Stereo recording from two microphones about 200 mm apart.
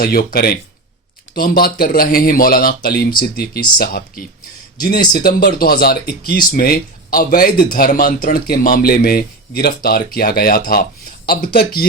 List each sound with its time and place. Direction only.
0.0 s speech: 50° left (ahead or behind)